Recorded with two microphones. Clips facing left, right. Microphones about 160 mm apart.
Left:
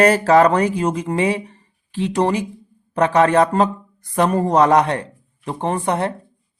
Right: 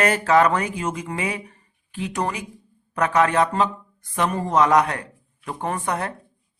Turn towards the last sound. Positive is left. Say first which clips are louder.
# left 5 dB
turn(degrees=25)  # may be behind; listen again after turning